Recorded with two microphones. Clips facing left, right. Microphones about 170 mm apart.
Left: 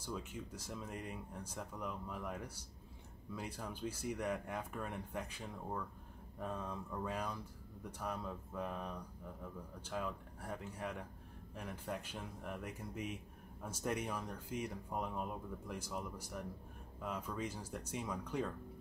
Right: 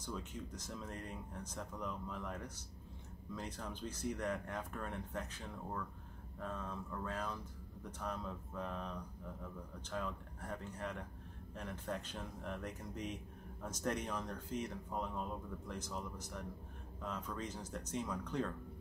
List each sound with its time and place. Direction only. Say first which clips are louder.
0.0 s speech: even; 10° left (ahead or behind)